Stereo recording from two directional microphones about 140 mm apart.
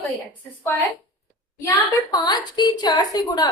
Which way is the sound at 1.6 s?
25° left (ahead or behind).